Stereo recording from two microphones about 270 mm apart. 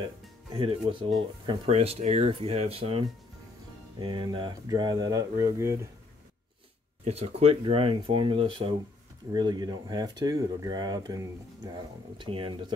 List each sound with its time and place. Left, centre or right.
0.0 s speech: centre
7.1 s speech: right